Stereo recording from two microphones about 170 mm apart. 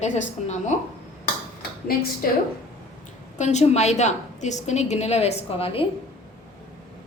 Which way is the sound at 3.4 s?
40° left (ahead or behind).